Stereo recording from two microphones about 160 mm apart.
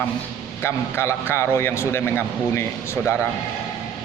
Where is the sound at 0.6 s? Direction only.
15° left (ahead or behind).